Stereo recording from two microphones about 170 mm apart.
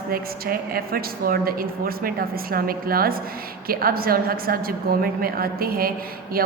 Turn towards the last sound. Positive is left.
turn(degrees=-60)  # may be behind; listen again after turning